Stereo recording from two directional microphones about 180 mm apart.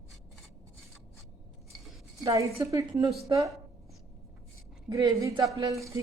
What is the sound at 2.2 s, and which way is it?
A woman's voice, 20° right (ahead or behind).